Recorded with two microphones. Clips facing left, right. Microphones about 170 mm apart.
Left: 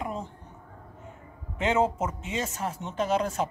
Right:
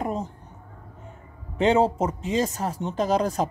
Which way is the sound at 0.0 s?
40° right (ahead or behind).